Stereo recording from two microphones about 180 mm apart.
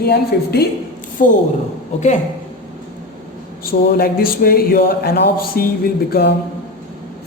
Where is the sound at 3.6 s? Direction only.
55° left (ahead or behind).